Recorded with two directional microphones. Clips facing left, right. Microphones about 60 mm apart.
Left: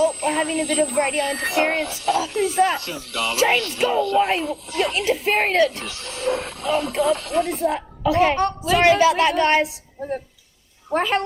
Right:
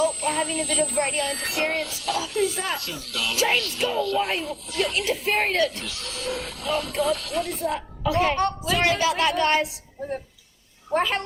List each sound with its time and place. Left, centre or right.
0.1 s speech: left
10.9 s a woman's voice: centre